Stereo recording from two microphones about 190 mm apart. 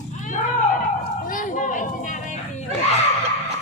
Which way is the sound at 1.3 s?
40° left (ahead or behind).